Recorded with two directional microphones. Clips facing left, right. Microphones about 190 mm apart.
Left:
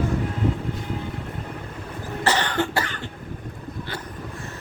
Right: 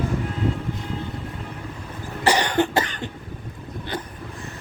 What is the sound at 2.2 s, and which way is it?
Cough, 15° right (ahead or behind).